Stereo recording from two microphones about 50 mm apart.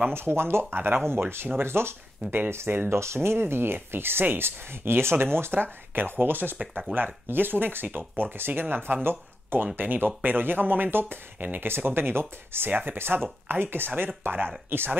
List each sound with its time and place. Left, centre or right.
0.1 s speech: right
2.9 s speech: right